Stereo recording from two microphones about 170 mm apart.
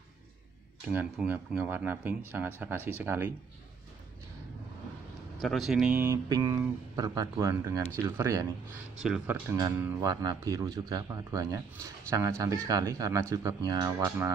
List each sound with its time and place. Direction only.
0.8 s speech: 10° right (ahead or behind)
5.4 s speech: centre (ahead or behind)
6.2 s a man's voice: 20° right (ahead or behind)
9.0 s a man's voice: 5° right (ahead or behind)